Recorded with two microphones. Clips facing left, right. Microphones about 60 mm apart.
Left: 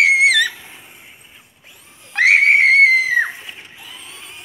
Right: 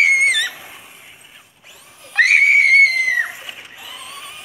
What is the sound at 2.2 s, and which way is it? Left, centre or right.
Neigh, left.